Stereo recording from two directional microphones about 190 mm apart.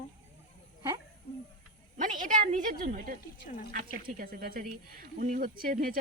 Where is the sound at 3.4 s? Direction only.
45° left (ahead or behind).